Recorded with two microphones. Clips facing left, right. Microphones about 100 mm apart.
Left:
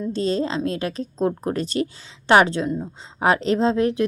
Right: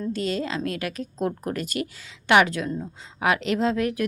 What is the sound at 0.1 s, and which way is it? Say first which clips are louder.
A woman's voice: left 5 dB; 30° left (ahead or behind).